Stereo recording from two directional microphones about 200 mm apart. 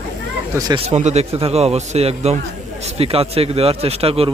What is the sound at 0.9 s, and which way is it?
A man's voice, 35° right (ahead or behind).